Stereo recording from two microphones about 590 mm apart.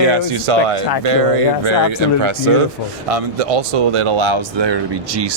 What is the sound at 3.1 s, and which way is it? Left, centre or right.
Speech, right.